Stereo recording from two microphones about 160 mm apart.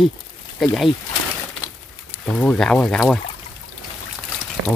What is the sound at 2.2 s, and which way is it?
Speech, 5° left (ahead or behind).